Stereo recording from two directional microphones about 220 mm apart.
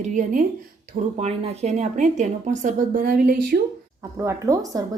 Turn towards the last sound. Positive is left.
turn(degrees=-15)  # may be behind; listen again after turning